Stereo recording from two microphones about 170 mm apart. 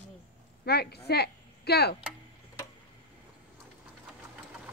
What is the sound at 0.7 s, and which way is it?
Speech, 70° left (ahead or behind).